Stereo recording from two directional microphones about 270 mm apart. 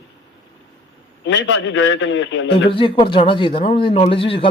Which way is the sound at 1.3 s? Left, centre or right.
Left.